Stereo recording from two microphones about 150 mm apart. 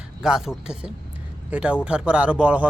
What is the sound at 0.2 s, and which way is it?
A man's voice, 5° right (ahead or behind).